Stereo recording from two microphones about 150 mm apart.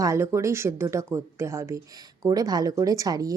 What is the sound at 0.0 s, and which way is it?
A woman's voice, 20° right (ahead or behind).